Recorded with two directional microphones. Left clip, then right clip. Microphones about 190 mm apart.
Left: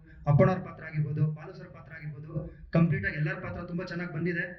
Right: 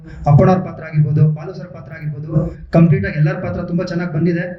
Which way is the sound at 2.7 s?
90° right.